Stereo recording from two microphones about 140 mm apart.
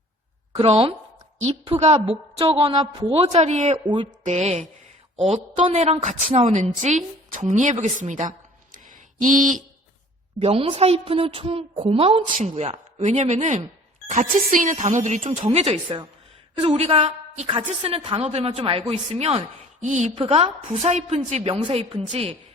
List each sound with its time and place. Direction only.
0.6 s a woman's voice: 45° right (ahead or behind)
3.1 s a woman's voice: 45° right (ahead or behind)
3.8 s a woman's voice: 35° right (ahead or behind)
4.2 s a woman's voice: 55° right (ahead or behind)
10.4 s a woman's voice: 40° right (ahead or behind)
12.3 s speech: 65° right (ahead or behind)
12.6 s a woman's voice: 55° right (ahead or behind)
19.8 s speech: 55° right (ahead or behind)
20.1 s a woman's voice: 45° right (ahead or behind)
21.5 s a woman's voice: 40° right (ahead or behind)